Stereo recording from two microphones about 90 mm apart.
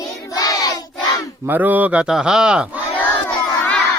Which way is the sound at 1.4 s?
20° right (ahead or behind).